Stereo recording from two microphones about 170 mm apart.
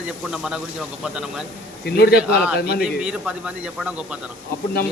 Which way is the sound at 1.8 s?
70° left (ahead or behind).